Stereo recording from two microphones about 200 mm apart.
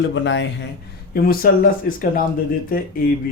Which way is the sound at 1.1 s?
45° left (ahead or behind).